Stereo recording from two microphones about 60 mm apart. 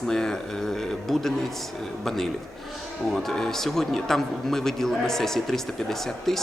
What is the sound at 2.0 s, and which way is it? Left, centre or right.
A man's voice, centre.